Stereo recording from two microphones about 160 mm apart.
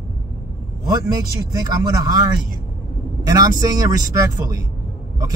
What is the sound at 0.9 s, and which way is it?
Speech, 25° right (ahead or behind).